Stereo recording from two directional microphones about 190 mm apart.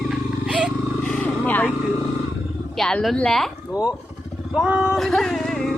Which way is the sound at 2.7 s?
Centre (ahead or behind).